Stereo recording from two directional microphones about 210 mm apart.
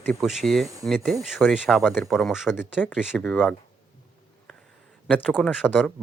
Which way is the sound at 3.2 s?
10° left (ahead or behind).